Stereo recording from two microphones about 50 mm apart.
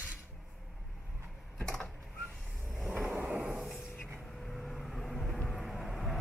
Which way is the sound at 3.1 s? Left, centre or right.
Right.